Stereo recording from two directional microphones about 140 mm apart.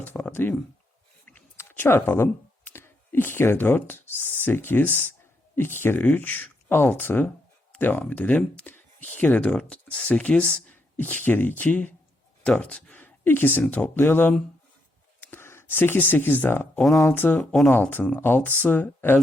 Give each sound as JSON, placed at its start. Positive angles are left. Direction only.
{"t": 0.0, "sound": "a sound", "side_deg": 15}
{"t": 1.4, "sound": "speech", "side_deg": 15}
{"t": 17.4, "sound": "speech", "side_deg": 0}
{"t": 17.7, "sound": "speech", "side_deg": 15}